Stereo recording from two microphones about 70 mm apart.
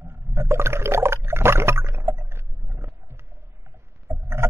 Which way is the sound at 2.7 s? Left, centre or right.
Right.